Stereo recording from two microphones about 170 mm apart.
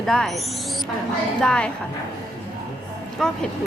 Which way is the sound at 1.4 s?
5° left (ahead or behind).